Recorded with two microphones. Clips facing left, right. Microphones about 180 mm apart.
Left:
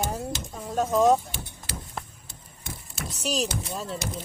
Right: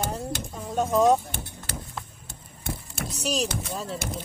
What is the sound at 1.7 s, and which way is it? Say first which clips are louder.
Vehicle: right 1 dB; 50° right (ahead or behind).